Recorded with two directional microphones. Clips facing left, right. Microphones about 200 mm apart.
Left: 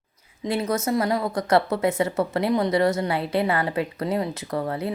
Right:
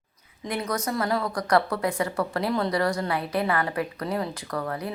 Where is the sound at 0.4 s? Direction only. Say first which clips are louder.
Left 5 dB; 25° left (ahead or behind).